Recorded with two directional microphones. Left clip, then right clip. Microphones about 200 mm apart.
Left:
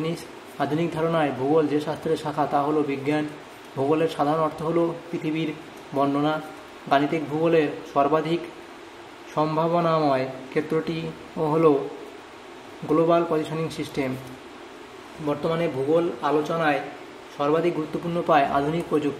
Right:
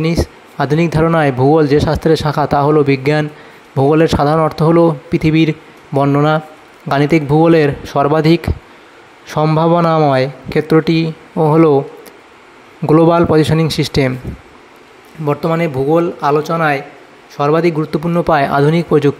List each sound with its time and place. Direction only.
0.0 s speech: 45° right (ahead or behind)
12.9 s speech: 50° right (ahead or behind)
15.2 s speech: 45° right (ahead or behind)